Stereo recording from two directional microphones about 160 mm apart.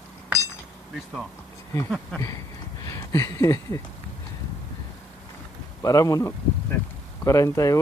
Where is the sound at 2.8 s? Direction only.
20° left (ahead or behind).